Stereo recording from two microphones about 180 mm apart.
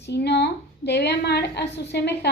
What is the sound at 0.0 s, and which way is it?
A woman's voice, 70° left (ahead or behind).